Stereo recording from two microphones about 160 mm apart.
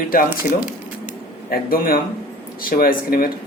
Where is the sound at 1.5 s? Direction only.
65° left (ahead or behind).